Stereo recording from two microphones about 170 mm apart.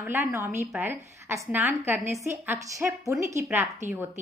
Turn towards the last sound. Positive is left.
turn(degrees=-15)  # may be behind; listen again after turning